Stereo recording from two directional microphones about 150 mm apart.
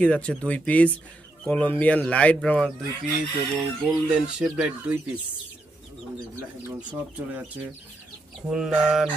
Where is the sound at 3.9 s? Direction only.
5° right (ahead or behind).